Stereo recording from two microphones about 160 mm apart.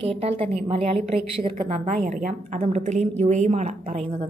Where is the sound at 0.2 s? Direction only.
40° right (ahead or behind).